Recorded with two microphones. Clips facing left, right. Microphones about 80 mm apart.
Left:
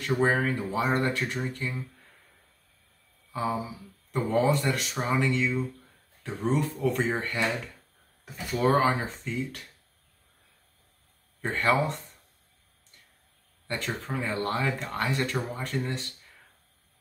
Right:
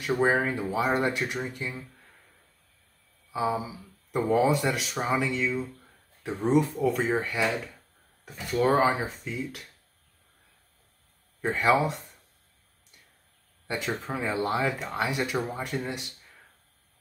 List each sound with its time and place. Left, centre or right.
0.0 s speech: centre
0.7 s speech: centre
1.0 s speech: centre
3.3 s a sound: centre
4.1 s speech: centre
6.2 s speech: centre
6.8 s speech: centre
11.4 s speech: centre
13.7 s speech: centre